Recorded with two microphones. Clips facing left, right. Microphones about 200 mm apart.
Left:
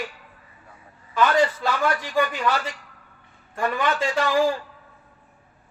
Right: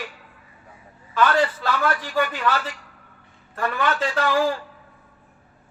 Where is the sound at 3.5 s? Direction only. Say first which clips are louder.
Even; 15° left (ahead or behind).